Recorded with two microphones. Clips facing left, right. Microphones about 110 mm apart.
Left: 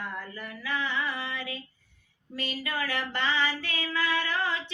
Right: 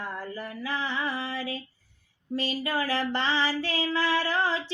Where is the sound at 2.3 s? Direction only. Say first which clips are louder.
Right 5 dB; 30° right (ahead or behind).